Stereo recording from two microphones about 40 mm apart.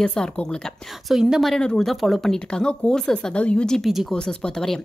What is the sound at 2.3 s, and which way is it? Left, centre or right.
Speech, left.